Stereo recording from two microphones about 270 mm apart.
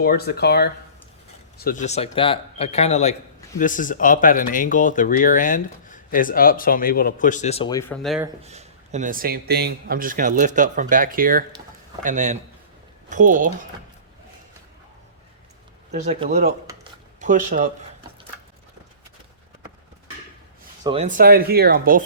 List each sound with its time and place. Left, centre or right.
0.0 s speech: left; by 8.3 s centre
8.4 s a man's voice: right
15.9 s speech: right
20.8 s a man's voice: right